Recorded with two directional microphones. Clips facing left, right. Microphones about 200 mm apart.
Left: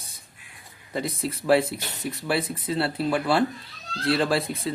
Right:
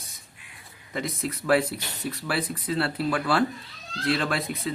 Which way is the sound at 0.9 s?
30° left (ahead or behind).